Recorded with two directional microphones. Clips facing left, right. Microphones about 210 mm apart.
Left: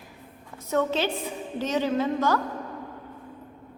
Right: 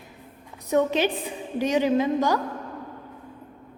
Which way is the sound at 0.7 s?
15° right (ahead or behind).